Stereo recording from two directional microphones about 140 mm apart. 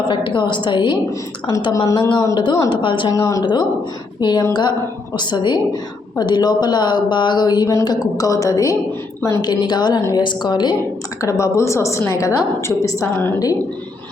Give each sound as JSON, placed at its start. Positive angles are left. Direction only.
{"t": 0.1, "sound": "speech", "side_deg": 35}